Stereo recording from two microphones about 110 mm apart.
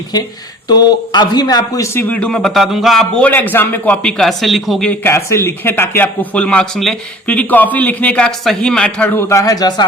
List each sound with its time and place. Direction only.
0.7 s a man's voice: 40° left (ahead or behind); by 2.1 s 25° left (ahead or behind)
2.1 s a man's voice: 10° left (ahead or behind)
3.2 s a man's voice: 15° left (ahead or behind); by 4.9 s centre (ahead or behind)
4.9 s a man's voice: 25° left (ahead or behind)
9.2 s a man's voice: 30° left (ahead or behind)